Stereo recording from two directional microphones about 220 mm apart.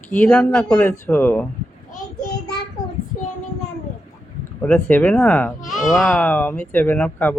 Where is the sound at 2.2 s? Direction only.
45° left (ahead or behind).